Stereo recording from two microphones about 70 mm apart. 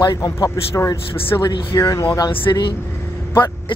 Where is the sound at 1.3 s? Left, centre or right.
Left.